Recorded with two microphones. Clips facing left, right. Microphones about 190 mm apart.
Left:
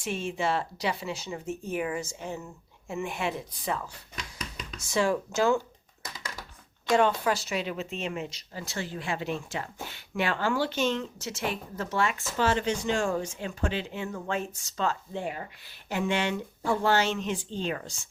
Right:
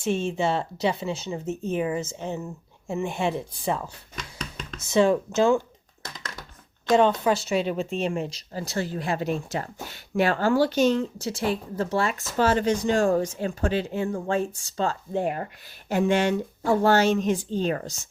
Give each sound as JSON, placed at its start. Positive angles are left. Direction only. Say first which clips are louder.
{"t": 0.0, "sound": "speech", "louder": "right 5 dB", "side_deg": -25}
{"t": 4.1, "sound": "a sound", "louder": "right 3 dB", "side_deg": 5}
{"t": 4.8, "sound": "speech", "louder": "right 6 dB", "side_deg": -20}
{"t": 7.3, "sound": "speech", "louder": "right 6 dB", "side_deg": -25}
{"t": 15.1, "sound": "speech", "louder": "right 7 dB", "side_deg": -50}